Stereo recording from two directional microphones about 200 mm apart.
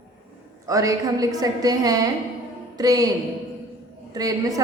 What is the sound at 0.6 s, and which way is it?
A woman's voice, 15° right (ahead or behind).